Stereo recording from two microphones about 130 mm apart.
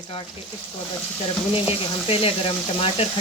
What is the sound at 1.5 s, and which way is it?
Speech, 45° left (ahead or behind).